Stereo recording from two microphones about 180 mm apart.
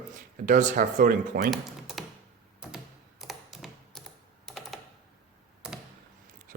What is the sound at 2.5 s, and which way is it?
Typing, 5° right (ahead or behind).